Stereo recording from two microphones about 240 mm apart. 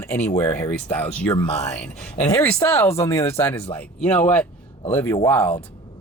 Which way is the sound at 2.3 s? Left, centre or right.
Centre.